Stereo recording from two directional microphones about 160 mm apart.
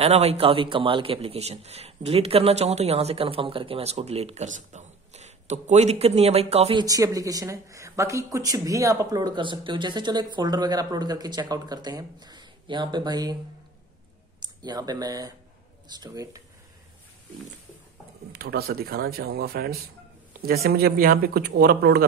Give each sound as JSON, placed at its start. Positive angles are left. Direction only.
{"t": 0.0, "sound": "a man's voice", "side_deg": -40}
{"t": 6.8, "sound": "a woman's voice", "side_deg": -20}
{"t": 14.4, "sound": "a woman's voice", "side_deg": -25}
{"t": 18.3, "sound": "speech", "side_deg": -75}